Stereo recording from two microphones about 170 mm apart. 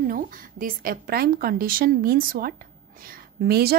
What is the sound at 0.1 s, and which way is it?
A woman's voice, 55° right (ahead or behind).